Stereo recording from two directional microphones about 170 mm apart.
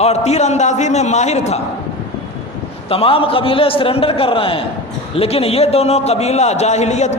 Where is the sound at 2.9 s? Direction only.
35° left (ahead or behind).